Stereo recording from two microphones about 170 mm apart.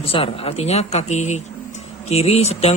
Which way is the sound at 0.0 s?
35° left (ahead or behind).